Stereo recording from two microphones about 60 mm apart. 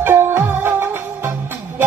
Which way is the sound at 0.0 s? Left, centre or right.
Right.